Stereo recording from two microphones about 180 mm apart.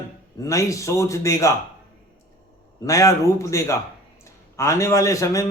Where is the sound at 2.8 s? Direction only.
20° left (ahead or behind).